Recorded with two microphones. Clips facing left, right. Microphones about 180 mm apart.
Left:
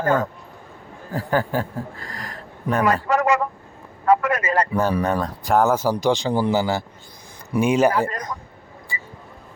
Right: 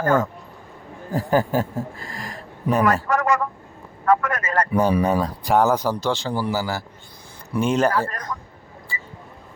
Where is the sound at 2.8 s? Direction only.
15° left (ahead or behind).